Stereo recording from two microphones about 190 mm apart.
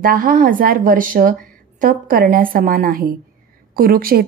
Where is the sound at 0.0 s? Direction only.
50° right (ahead or behind).